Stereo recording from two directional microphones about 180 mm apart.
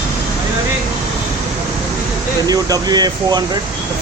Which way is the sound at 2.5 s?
20° right (ahead or behind).